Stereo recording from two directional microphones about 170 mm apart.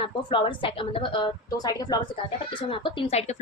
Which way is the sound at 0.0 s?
30° left (ahead or behind).